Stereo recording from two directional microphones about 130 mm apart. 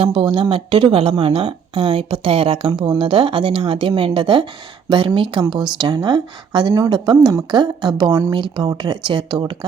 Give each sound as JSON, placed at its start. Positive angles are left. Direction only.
{"t": 0.0, "sound": "speech", "side_deg": -40}